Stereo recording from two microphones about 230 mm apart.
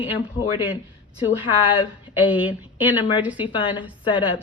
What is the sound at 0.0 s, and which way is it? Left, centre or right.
Speech, centre.